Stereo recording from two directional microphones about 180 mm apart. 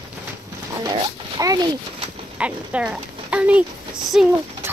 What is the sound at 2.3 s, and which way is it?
Speech, 5° right (ahead or behind).